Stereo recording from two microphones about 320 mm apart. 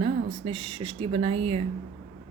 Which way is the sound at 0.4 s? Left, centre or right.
Centre.